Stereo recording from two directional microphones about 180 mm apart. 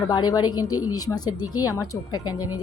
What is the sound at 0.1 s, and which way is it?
A woman's voice, 20° left (ahead or behind).